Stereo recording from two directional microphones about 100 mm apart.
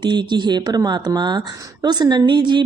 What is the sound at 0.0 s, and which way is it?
A woman's voice, 50° right (ahead or behind).